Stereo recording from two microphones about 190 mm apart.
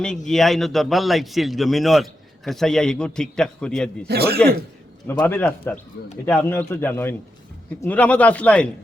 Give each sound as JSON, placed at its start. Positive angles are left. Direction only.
{"t": 0.3, "sound": "a man's voice", "side_deg": 0}
{"t": 4.0, "sound": "speech", "side_deg": -55}
{"t": 5.0, "sound": "a man's voice", "side_deg": 10}